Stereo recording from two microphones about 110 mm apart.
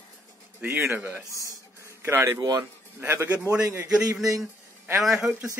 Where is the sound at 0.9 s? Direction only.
20° right (ahead or behind).